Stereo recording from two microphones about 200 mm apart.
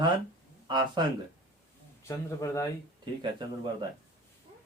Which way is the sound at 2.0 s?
15° left (ahead or behind).